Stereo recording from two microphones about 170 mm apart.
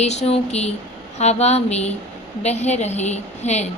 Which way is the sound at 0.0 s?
40° left (ahead or behind).